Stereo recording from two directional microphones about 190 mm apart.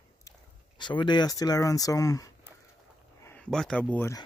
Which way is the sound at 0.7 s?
25° left (ahead or behind).